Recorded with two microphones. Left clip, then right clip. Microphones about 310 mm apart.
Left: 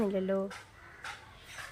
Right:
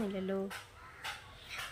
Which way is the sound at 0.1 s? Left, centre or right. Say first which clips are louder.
Left 6 dB; centre.